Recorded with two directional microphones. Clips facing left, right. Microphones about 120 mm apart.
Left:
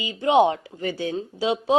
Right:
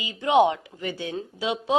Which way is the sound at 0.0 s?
35° left (ahead or behind).